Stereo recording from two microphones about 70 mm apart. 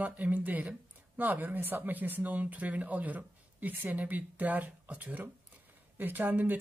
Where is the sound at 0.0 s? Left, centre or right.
Right.